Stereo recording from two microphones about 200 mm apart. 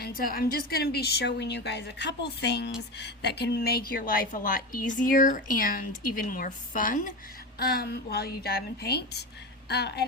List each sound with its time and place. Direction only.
0.0 s a woman's voice: 45° left (ahead or behind)